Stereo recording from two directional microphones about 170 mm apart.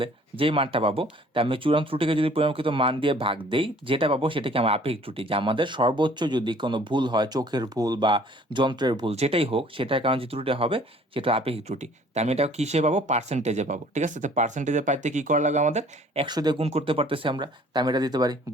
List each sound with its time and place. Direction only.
0.0 s speech: 30° right (ahead or behind)
9.1 s speech: 35° right (ahead or behind)
16.2 s speech: 25° right (ahead or behind)
16.6 s speech: 35° right (ahead or behind)